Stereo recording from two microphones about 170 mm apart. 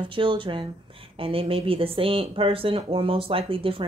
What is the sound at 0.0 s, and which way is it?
Speech, 30° right (ahead or behind).